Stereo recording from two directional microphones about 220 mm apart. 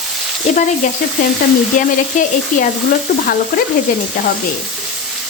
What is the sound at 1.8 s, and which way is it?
Stir, 35° left (ahead or behind).